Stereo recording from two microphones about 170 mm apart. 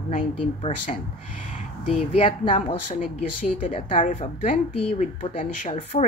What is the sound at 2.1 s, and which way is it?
Speech, 45° left (ahead or behind).